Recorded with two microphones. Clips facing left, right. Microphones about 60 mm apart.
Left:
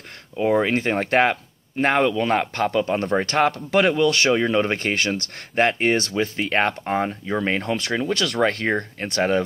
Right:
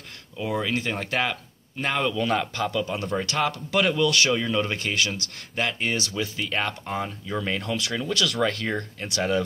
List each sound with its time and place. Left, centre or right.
0.4 s speech: left
3.8 s speech: left
8.5 s speech: left
8.7 s speech: left